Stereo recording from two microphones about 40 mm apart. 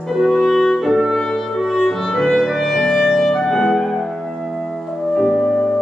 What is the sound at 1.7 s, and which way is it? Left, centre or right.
Clarinet, centre.